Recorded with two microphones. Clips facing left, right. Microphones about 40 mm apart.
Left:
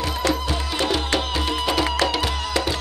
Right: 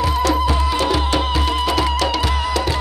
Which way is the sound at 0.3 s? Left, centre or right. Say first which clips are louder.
Right 6 dB; centre.